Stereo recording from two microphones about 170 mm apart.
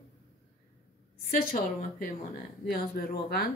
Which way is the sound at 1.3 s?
60° left (ahead or behind).